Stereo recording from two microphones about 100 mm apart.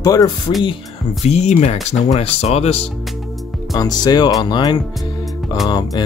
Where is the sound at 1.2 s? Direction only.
90° left.